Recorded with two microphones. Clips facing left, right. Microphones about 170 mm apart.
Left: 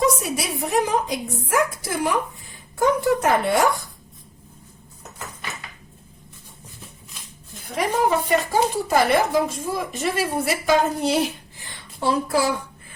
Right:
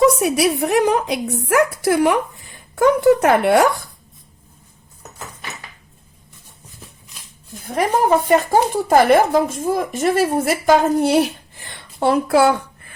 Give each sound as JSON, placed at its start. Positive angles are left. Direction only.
{"t": 0.2, "sound": "a woman's voice", "side_deg": -65}
{"t": 7.7, "sound": "speech", "side_deg": -50}